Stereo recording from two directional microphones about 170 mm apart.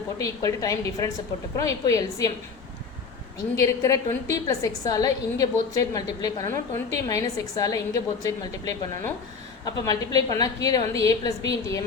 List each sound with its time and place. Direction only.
0.2 s a woman's voice: 20° left (ahead or behind)
3.3 s a woman's voice: 20° left (ahead or behind)